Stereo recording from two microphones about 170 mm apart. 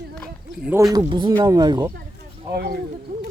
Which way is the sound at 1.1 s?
30° right (ahead or behind).